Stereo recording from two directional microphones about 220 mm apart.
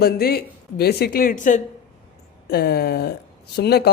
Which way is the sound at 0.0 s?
45° left (ahead or behind).